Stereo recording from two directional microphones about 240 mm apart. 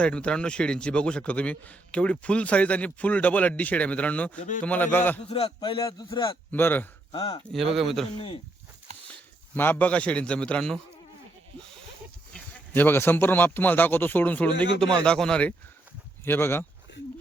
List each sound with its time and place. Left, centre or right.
0.0 s a man's voice: centre
5.3 s a man's voice: left
7.1 s speech: centre
7.5 s a man's voice: centre
8.9 s a sound: right
9.6 s a man's voice: centre
12.3 s a man's voice: centre